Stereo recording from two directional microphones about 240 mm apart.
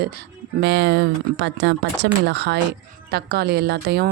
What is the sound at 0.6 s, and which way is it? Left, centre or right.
A woman's voice, right.